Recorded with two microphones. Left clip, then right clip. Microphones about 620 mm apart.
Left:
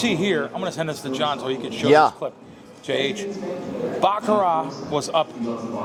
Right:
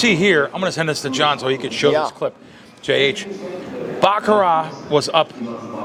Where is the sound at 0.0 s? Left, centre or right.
Right.